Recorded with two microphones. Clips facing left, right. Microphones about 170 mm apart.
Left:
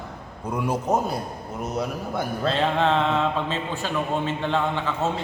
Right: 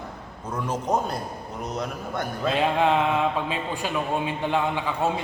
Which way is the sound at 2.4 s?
10° right (ahead or behind).